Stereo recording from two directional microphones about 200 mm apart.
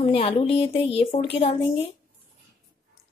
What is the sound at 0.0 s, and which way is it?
A woman's voice, 30° left (ahead or behind).